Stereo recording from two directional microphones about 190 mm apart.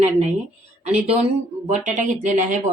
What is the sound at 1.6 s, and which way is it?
Speech, 40° right (ahead or behind).